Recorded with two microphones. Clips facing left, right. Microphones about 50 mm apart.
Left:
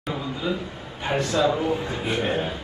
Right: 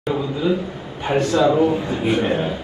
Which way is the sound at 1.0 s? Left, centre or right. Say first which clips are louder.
Right 5 dB; right.